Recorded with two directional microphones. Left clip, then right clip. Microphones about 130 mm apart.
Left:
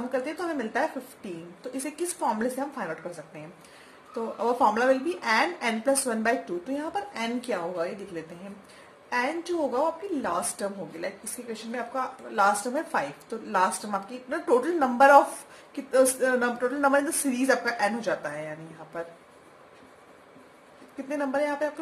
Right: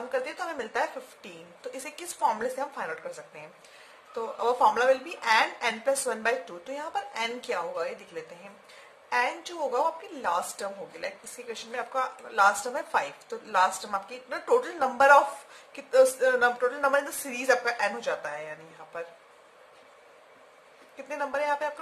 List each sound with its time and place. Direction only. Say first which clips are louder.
0.1 s a woman's voice: left 1 dB; 35° right (ahead or behind)
2.2 s a woman's voice: right 2 dB; 40° right (ahead or behind)
4.4 s a woman's voice: even; 30° right (ahead or behind)
21.1 s a woman's voice: left 1 dB; 35° right (ahead or behind)